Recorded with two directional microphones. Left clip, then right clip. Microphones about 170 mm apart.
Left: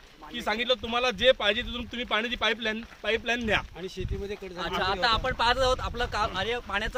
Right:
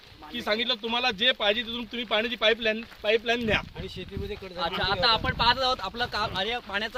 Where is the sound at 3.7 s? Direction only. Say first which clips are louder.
Left 1 dB; centre (ahead or behind); by 7.0 s 20° left (ahead or behind).